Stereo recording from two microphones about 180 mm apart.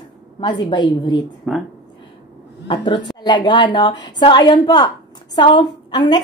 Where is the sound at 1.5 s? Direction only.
Centre (ahead or behind).